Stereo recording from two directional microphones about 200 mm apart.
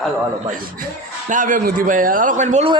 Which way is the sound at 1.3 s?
40° right (ahead or behind).